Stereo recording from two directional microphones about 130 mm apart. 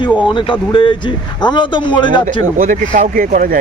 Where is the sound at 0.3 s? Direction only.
40° left (ahead or behind).